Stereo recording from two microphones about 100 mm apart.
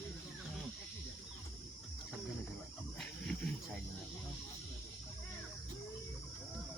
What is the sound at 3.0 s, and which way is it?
Wild animals, 5° left (ahead or behind).